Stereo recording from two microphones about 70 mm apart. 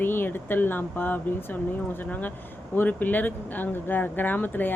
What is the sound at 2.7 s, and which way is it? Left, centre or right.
Speech, left.